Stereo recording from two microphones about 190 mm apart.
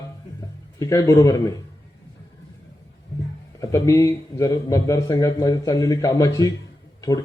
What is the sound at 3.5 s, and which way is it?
A man's voice, 15° left (ahead or behind).